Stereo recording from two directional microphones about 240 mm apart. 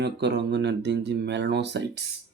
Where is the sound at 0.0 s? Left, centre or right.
Right.